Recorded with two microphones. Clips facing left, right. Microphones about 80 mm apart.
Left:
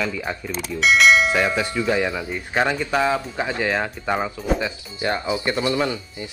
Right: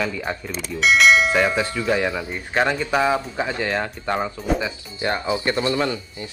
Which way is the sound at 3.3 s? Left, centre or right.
Centre.